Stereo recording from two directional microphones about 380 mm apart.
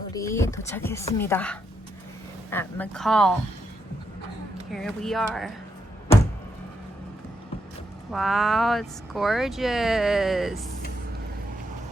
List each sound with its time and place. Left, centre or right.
0.1 s speech: centre
4.7 s speech: centre
8.1 s speech: centre